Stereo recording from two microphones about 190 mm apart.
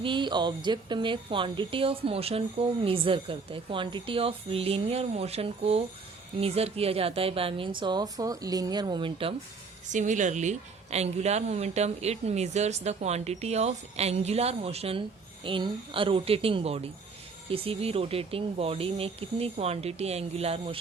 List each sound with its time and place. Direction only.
0.0 s a woman's voice: 25° right (ahead or behind)
9.9 s a woman's voice: 40° right (ahead or behind)